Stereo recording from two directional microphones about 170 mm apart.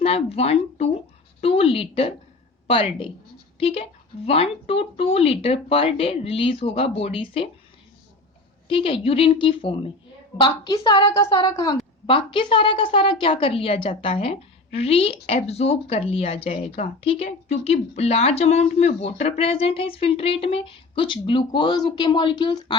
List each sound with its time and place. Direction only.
0.0 s a woman's voice: 35° left (ahead or behind)
8.6 s a woman's voice: 30° left (ahead or behind)